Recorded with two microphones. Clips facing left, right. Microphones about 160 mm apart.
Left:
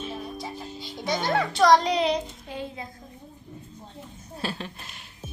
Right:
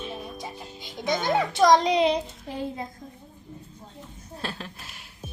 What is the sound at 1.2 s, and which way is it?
Speech, 20° right (ahead or behind).